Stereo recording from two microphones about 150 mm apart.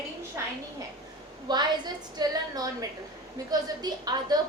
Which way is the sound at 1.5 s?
30° right (ahead or behind).